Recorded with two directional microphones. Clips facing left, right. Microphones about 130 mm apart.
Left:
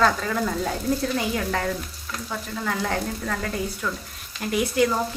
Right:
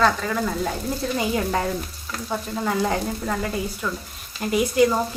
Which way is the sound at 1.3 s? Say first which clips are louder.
Right 2 dB; 25° right (ahead or behind).